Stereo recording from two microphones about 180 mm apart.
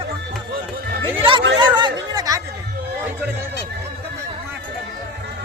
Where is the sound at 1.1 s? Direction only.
30° right (ahead or behind).